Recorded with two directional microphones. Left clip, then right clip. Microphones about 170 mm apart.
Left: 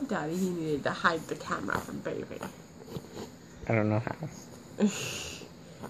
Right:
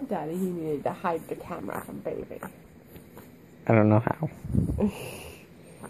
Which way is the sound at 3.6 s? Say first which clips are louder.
Right 7 dB; 40° right (ahead or behind).